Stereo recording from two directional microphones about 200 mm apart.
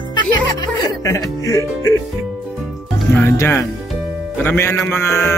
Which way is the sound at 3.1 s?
10° left (ahead or behind).